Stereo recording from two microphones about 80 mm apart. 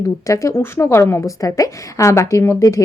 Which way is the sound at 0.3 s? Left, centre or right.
Left.